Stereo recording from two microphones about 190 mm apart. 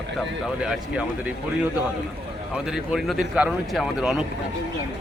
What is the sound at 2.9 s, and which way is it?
Speech, centre (ahead or behind).